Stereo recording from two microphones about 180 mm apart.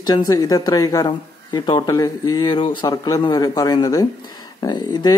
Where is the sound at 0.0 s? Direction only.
20° left (ahead or behind).